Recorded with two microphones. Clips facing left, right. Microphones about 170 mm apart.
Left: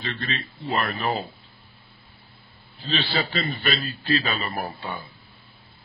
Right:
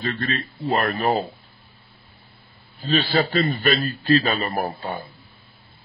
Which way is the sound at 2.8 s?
45° right (ahead or behind).